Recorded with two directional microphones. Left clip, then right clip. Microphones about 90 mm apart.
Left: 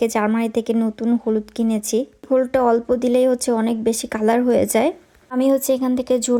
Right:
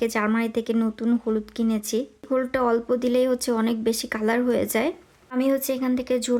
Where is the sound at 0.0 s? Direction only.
30° left (ahead or behind).